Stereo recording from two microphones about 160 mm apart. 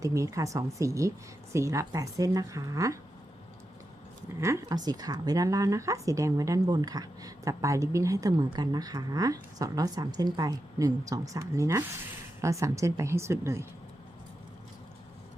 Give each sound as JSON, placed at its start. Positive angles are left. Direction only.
{"t": 0.0, "sound": "speech", "side_deg": -20}
{"t": 4.4, "sound": "a woman's voice", "side_deg": -15}